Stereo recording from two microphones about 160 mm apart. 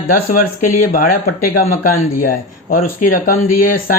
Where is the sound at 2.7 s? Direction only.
60° left (ahead or behind).